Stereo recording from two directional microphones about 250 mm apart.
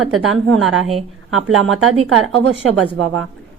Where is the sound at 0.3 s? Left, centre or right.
Right.